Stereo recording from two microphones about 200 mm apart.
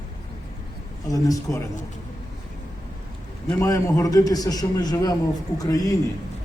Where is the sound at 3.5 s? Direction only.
15° left (ahead or behind).